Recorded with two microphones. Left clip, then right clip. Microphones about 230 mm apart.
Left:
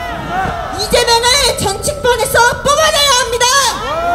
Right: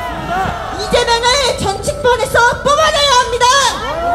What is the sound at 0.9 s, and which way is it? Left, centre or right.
Music, left.